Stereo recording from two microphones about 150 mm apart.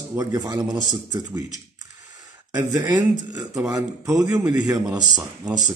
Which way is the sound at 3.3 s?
25° right (ahead or behind).